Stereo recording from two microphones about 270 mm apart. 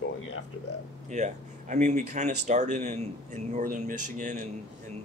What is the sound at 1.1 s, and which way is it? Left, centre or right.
Speech, right.